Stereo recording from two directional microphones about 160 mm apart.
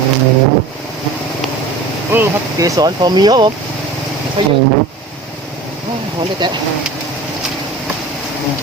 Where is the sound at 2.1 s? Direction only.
15° right (ahead or behind).